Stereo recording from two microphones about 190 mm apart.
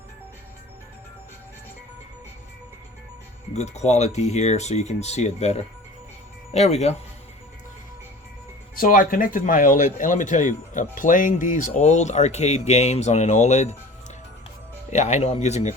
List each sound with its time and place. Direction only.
3.5 s speech: 35° left (ahead or behind)
8.7 s speech: 45° left (ahead or behind)
14.8 s speech: 35° left (ahead or behind)